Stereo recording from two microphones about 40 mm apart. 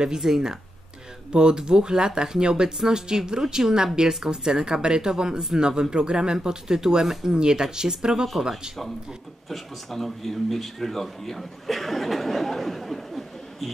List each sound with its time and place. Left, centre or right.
0.0 s speech: centre
9.5 s speech: centre